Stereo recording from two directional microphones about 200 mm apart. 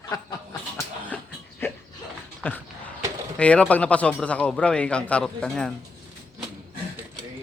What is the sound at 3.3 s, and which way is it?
Speech, 5° left (ahead or behind).